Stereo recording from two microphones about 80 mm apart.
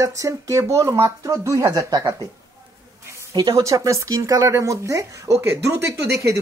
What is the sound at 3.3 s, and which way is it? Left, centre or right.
Speech, right.